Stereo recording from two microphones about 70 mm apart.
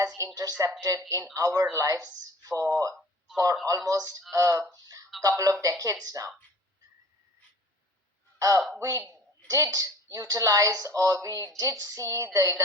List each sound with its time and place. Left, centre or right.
0.8 s speech: right
3.3 s music: right
3.7 s speech: right
4.3 s music: right
4.7 s a sound: right
5.4 s speech: right
8.4 s a woman's voice: right